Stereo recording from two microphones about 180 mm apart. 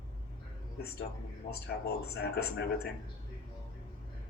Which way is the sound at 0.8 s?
60° left (ahead or behind).